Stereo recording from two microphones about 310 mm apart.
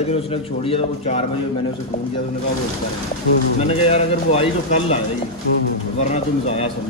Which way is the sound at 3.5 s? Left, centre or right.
Centre.